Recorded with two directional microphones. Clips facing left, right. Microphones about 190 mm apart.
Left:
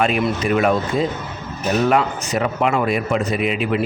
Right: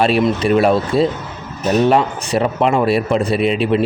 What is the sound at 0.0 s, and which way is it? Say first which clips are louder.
Speech: right 4 dB; 30° right (ahead or behind).